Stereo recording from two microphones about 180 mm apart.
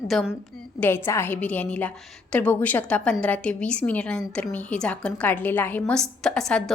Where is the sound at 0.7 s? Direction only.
10° left (ahead or behind).